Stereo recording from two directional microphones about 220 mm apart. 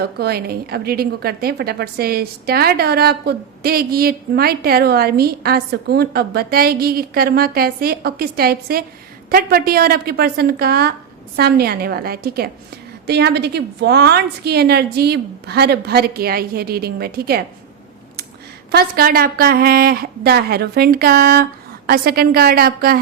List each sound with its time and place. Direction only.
0.0 s a woman's voice: 45° right (ahead or behind)
18.7 s a woman's voice: 45° right (ahead or behind)